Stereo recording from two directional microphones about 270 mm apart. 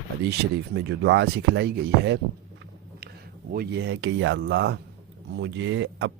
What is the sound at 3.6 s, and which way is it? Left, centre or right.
Speech, right.